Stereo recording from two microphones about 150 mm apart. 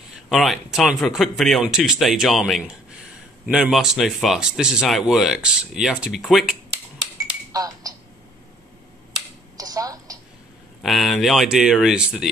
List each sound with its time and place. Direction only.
0.1 s speech: centre (ahead or behind)
7.5 s a sound: 25° right (ahead or behind)
9.1 s computer keyboard: 25° right (ahead or behind)
10.8 s speech: centre (ahead or behind)